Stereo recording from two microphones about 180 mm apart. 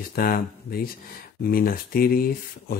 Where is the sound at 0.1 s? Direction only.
55° left (ahead or behind).